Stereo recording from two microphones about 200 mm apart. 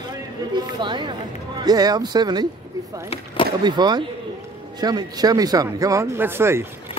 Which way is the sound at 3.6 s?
20° right (ahead or behind).